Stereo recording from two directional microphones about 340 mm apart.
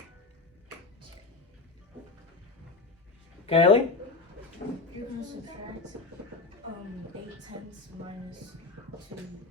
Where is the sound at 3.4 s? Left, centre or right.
Centre.